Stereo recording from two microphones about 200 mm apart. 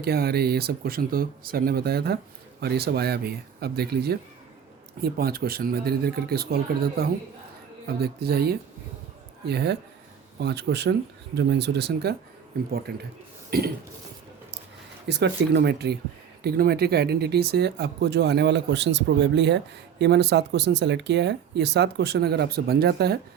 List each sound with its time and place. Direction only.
0.0 s speech: 50° right (ahead or behind)
15.0 s speech: 55° right (ahead or behind)